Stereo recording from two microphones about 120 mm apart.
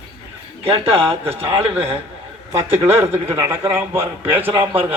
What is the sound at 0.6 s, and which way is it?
A man's voice, 50° right (ahead or behind).